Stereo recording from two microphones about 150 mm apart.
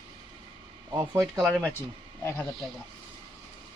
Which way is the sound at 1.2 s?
5° right (ahead or behind).